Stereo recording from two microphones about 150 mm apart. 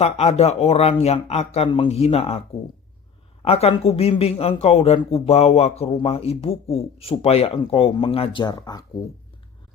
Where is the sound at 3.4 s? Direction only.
40° left (ahead or behind).